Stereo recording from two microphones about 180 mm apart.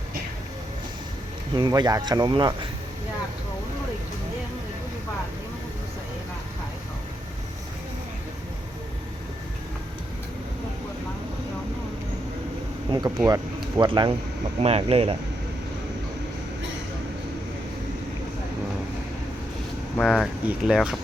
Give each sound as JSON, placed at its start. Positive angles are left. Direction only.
{"t": 1.5, "sound": "speech", "side_deg": -25}
{"t": 12.9, "sound": "speech", "side_deg": -20}
{"t": 20.0, "sound": "speech", "side_deg": 0}